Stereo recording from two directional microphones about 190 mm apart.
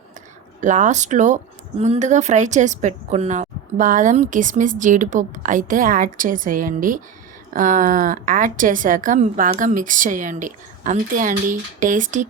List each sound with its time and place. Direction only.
0.6 s speech: 40° right (ahead or behind)